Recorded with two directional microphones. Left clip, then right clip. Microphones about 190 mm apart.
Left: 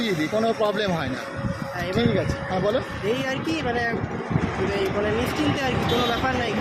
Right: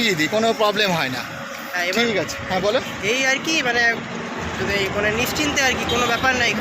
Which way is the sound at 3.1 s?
15° left (ahead or behind).